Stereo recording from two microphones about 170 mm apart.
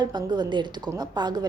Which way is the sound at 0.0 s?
25° right (ahead or behind).